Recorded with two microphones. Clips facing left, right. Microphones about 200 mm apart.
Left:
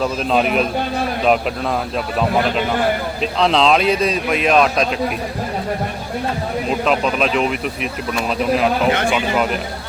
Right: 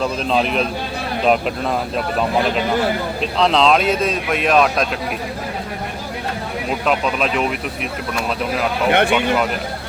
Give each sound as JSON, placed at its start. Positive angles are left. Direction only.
{"t": 0.0, "sound": "speech", "side_deg": 5}
{"t": 3.3, "sound": "speech", "side_deg": 0}
{"t": 6.8, "sound": "speech", "side_deg": 0}
{"t": 8.9, "sound": "speech", "side_deg": -60}